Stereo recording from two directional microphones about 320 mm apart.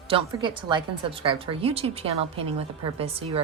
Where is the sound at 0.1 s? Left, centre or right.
Centre.